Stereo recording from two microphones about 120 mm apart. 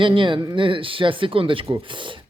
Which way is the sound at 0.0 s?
45° right (ahead or behind).